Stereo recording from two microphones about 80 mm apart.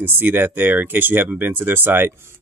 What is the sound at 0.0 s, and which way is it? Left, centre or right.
Speech, right.